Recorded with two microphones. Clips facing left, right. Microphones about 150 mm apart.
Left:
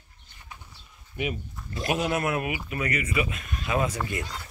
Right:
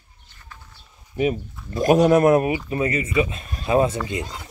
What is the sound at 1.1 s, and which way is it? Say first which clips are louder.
Speech: right 9 dB; 35° right (ahead or behind).